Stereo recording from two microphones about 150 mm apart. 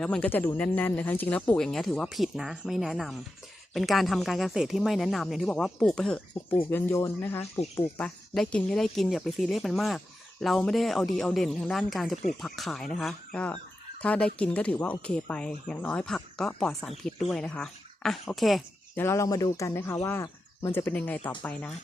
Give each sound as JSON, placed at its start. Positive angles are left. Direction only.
{"t": 0.0, "sound": "speech", "side_deg": 5}
{"t": 6.7, "sound": "speech", "side_deg": 15}
{"t": 18.9, "sound": "speech", "side_deg": 20}